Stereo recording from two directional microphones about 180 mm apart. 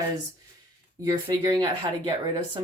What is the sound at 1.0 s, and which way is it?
Speech, 20° right (ahead or behind).